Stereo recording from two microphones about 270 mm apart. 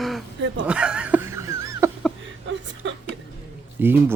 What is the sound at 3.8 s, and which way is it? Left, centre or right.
Speech, centre.